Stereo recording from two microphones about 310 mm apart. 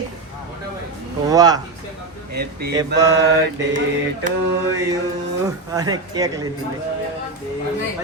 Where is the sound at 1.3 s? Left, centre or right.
Centre.